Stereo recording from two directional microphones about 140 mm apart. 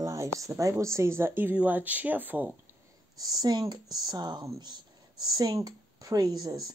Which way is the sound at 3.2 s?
30° right (ahead or behind).